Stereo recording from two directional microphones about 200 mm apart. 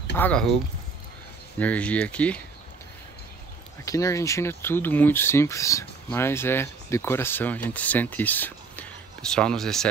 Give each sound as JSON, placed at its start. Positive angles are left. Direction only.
{"t": 0.1, "sound": "speech", "side_deg": 5}
{"t": 1.6, "sound": "speech", "side_deg": 5}
{"t": 3.8, "sound": "speech", "side_deg": 15}